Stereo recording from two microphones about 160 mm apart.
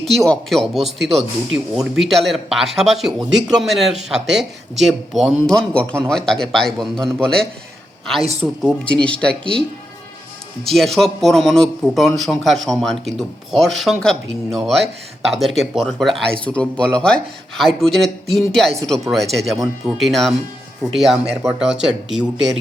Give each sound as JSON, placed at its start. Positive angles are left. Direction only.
{"t": 0.0, "sound": "speech", "side_deg": 0}
{"t": 8.6, "sound": "speech", "side_deg": 5}
{"t": 10.6, "sound": "speech", "side_deg": 0}